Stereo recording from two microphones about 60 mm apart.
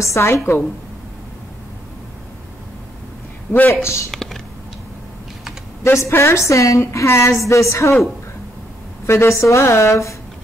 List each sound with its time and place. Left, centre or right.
0.0 s a woman's voice: left
3.5 s speech: centre
3.8 s a woman's voice: left
4.1 s typing: centre
5.9 s a woman's voice: left
9.0 s a woman's voice: left